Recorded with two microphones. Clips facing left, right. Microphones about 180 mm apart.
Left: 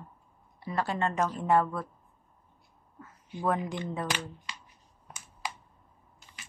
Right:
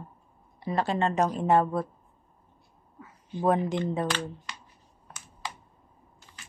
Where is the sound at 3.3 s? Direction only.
20° right (ahead or behind).